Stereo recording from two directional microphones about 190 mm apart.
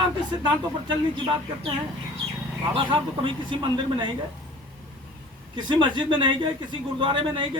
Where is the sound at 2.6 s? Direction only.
25° right (ahead or behind).